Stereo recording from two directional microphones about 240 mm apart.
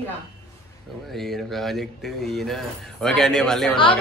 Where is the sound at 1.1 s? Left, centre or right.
Centre.